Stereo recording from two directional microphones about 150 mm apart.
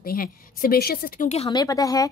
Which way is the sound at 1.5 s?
25° left (ahead or behind).